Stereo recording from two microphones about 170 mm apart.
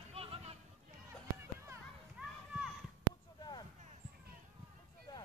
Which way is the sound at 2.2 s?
5° right (ahead or behind).